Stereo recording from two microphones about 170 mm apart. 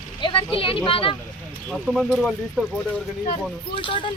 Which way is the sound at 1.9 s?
Centre (ahead or behind).